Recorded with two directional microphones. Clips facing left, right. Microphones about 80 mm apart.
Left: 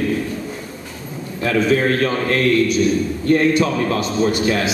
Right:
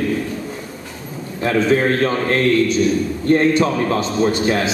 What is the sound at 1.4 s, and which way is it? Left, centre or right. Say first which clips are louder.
A man's voice: right 1 dB; right.